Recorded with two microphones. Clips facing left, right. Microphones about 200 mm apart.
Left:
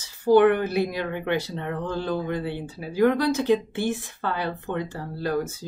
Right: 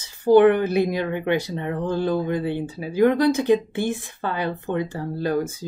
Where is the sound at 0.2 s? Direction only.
20° right (ahead or behind).